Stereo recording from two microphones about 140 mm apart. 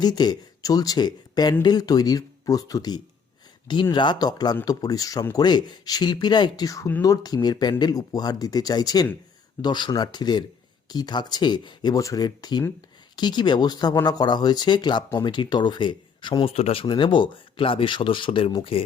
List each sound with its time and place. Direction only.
0.0 s speech: 30° left (ahead or behind)